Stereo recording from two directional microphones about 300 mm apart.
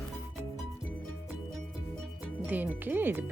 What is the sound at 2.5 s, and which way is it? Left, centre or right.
Speech, centre.